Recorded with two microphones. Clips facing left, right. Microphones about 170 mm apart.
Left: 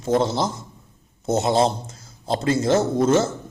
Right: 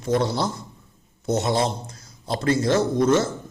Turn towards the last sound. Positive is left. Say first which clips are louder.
# left 1 dB
turn(degrees=25)  # may be behind; listen again after turning